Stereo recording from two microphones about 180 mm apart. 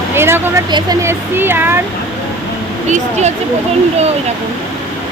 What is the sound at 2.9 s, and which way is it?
Speech, 40° right (ahead or behind).